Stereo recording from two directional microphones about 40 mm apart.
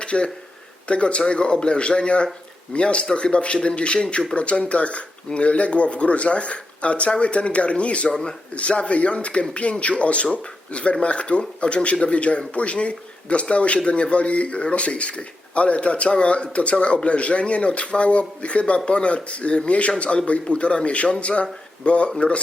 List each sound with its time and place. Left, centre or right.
0.0 s a man's voice: left